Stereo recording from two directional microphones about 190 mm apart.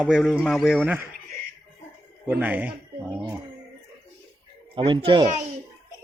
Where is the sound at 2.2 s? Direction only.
10° right (ahead or behind).